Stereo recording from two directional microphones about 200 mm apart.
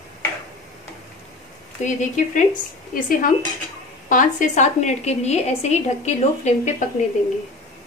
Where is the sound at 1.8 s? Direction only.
40° left (ahead or behind).